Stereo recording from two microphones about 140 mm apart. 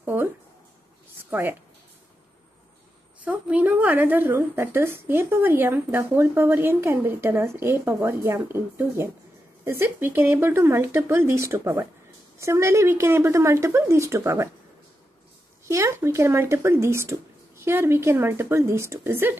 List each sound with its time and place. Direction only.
0.0 s speech: 15° right (ahead or behind)
1.3 s a woman's voice: 15° right (ahead or behind)
3.3 s a woman's voice: 10° right (ahead or behind)
15.6 s speech: 20° right (ahead or behind)